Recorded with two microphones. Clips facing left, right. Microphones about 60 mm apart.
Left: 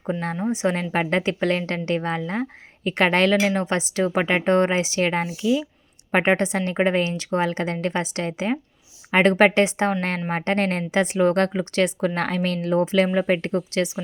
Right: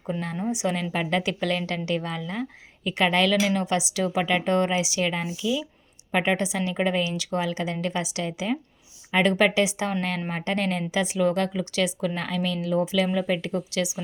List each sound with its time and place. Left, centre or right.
0.1 s a woman's voice: left
12.1 s speech: left
13.1 s speech: left
13.7 s a woman's voice: left